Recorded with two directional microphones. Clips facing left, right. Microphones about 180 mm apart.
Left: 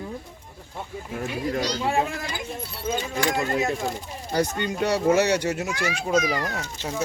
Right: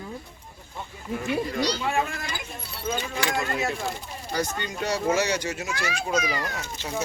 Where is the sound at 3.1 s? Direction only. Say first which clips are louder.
Left 3 dB; 45° left (ahead or behind).